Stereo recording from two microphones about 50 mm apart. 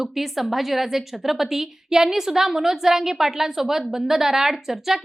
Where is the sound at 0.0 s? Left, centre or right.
Centre.